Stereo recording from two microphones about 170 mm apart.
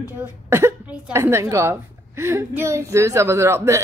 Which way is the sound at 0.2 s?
15° right (ahead or behind).